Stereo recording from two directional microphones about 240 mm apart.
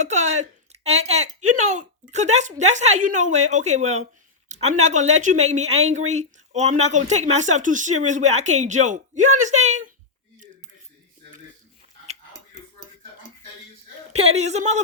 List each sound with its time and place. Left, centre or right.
0.0 s speech: right
14.1 s speech: right